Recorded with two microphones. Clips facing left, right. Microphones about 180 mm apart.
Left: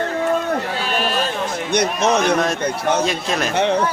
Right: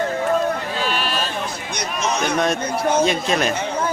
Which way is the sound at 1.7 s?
60° left (ahead or behind).